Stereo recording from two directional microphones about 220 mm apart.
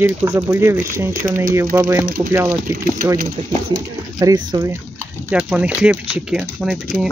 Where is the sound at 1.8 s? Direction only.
10° right (ahead or behind).